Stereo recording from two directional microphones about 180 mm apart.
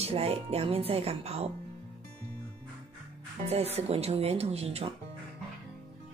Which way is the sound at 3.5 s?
35° right (ahead or behind).